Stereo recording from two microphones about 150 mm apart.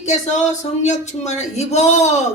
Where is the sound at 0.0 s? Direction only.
50° left (ahead or behind).